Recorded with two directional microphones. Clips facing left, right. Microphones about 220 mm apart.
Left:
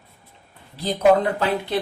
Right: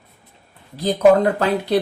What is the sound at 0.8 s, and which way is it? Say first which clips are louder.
Speech: right 4 dB; 45° right (ahead or behind).